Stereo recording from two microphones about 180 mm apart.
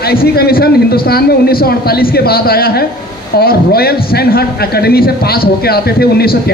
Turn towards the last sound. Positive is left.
turn(degrees=60)  # may be behind; listen again after turning